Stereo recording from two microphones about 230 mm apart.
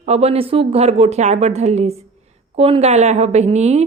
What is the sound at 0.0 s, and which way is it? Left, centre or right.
A woman's voice, right.